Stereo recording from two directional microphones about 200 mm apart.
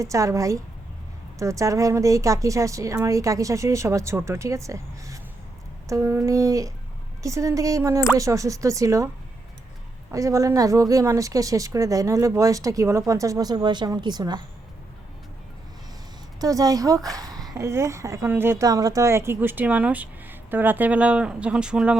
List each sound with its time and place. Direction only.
0.0 s speech: 15° right (ahead or behind)
10.1 s speech: 15° right (ahead or behind)
16.4 s speech: 15° right (ahead or behind)